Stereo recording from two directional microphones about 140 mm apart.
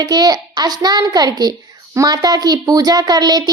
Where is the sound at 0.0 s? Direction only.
30° right (ahead or behind).